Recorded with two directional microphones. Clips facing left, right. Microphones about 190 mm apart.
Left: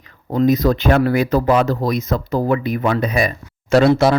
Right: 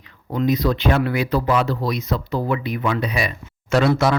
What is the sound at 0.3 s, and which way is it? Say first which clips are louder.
Speech: left 5 dB; 45° left (ahead or behind).